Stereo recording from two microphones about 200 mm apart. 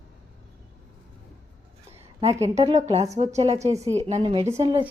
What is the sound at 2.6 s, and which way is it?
A woman's voice, 30° right (ahead or behind).